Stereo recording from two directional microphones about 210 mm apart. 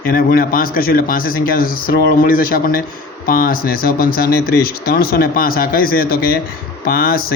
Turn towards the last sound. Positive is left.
turn(degrees=45)  # may be behind; listen again after turning